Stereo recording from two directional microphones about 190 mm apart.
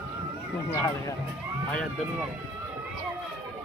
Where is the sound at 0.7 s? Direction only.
15° left (ahead or behind).